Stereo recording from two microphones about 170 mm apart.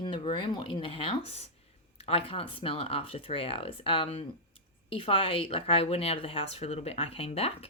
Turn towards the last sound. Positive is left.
turn(degrees=35)  # may be behind; listen again after turning